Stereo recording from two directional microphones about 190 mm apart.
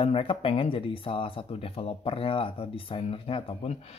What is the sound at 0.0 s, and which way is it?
Speech, 30° left (ahead or behind).